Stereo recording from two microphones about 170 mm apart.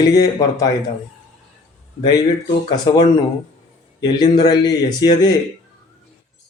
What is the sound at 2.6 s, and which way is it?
Speech, 25° left (ahead or behind).